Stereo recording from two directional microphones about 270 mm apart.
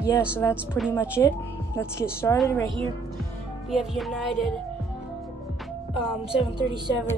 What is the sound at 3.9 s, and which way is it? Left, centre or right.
Speech, centre.